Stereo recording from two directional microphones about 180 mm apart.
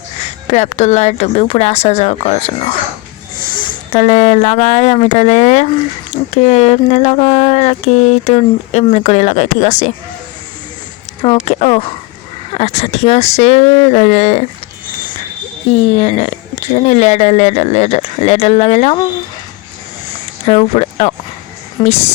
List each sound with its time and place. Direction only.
0.2 s speech: 40° left (ahead or behind)
3.5 s speech: 35° left (ahead or behind)
11.2 s speech: 35° left (ahead or behind)
15.7 s speech: 40° left (ahead or behind)
20.5 s speech: 35° left (ahead or behind)